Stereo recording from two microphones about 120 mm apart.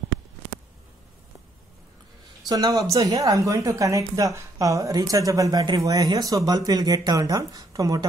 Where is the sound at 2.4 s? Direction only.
30° right (ahead or behind).